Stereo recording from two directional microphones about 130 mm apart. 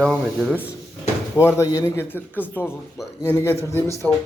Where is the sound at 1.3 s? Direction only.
20° left (ahead or behind).